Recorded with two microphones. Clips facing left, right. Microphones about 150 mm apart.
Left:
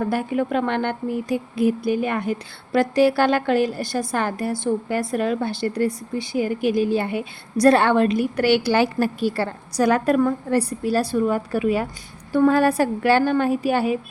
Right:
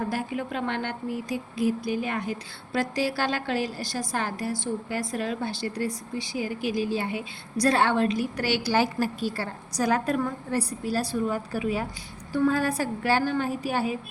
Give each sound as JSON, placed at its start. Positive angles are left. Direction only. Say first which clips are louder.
{"t": 0.1, "sound": "speech", "louder": "left 8 dB", "side_deg": 55}